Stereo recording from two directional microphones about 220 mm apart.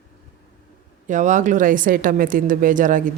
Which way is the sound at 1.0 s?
35° right (ahead or behind).